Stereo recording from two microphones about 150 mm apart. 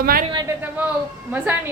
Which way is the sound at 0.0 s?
80° right.